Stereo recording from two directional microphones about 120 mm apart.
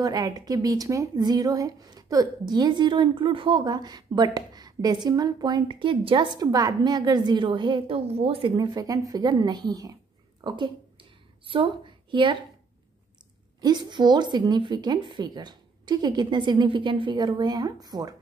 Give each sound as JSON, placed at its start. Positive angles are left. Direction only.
{"t": 0.0, "sound": "a woman's voice", "side_deg": -30}
{"t": 10.4, "sound": "a sound", "side_deg": -40}
{"t": 13.6, "sound": "a woman's voice", "side_deg": -35}